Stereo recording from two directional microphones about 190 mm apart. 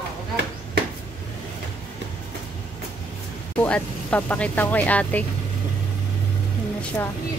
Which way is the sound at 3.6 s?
5° left (ahead or behind).